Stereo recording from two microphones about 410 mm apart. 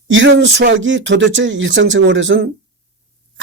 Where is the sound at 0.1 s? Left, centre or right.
Right.